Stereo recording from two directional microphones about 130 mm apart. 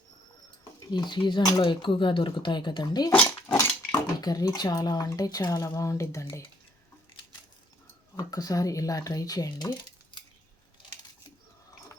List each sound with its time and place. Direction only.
0.9 s speech: 35° left (ahead or behind)
3.1 s dishes: 20° left (ahead or behind)
4.2 s speech: 30° left (ahead or behind)
8.1 s speech: 30° left (ahead or behind)